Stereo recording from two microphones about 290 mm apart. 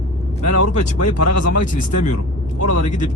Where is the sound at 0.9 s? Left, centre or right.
Left.